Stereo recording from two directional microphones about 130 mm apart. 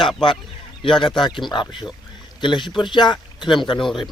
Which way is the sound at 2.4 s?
35° left (ahead or behind).